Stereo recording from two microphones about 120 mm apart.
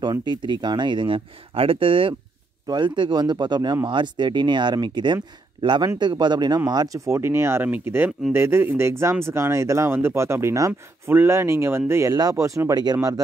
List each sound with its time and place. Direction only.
0.0 s speech: 40° right (ahead or behind)
2.6 s speech: 40° right (ahead or behind)